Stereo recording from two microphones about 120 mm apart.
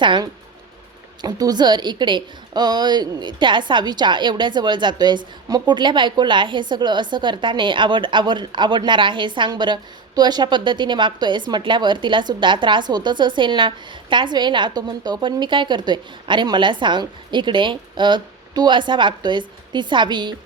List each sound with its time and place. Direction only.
0.0 s a woman's voice: 40° right (ahead or behind)